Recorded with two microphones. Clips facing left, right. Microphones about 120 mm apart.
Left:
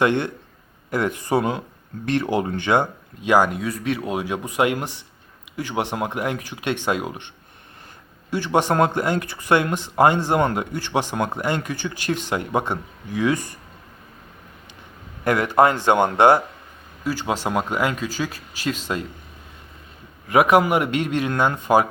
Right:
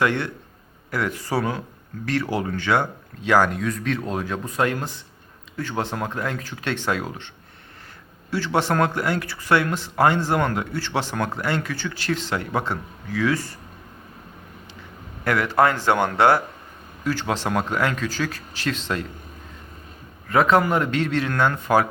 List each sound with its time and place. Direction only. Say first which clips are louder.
0.0 s speech: left 3 dB; 20° left (ahead or behind)
8.3 s speech: left 2 dB; 15° left (ahead or behind)
15.2 s speech: left 2 dB; 20° left (ahead or behind)
20.2 s speech: left 2 dB; 15° left (ahead or behind)